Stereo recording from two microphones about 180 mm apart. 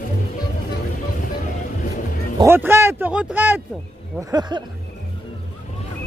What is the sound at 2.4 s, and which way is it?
Speech, 15° right (ahead or behind).